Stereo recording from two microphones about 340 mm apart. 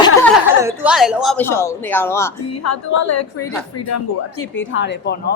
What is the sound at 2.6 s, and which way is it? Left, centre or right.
A woman's voice, left.